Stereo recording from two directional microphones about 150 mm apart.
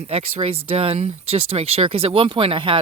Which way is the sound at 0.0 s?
45° right (ahead or behind).